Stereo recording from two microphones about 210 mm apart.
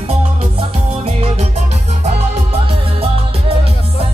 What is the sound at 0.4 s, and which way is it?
Music, 30° right (ahead or behind).